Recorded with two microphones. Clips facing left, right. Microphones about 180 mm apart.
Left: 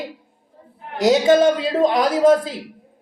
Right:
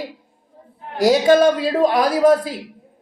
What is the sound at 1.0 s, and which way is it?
Speech, 20° left (ahead or behind).